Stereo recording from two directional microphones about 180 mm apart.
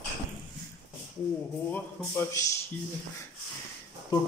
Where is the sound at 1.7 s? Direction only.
10° left (ahead or behind).